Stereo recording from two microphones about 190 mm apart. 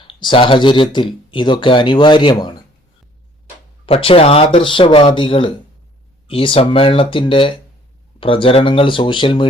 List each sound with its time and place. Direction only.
0.2 s speech: 25° left (ahead or behind)
3.8 s speech: 30° left (ahead or behind)